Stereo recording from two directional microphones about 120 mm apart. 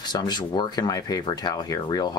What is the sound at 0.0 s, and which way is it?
Speech, 35° left (ahead or behind).